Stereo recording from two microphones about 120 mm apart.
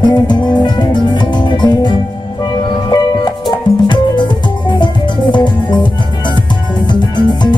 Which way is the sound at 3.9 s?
40° left (ahead or behind).